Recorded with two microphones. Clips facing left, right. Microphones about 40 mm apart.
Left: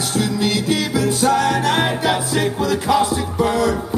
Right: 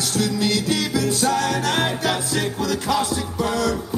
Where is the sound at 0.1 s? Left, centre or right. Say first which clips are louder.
Left 2 dB; left.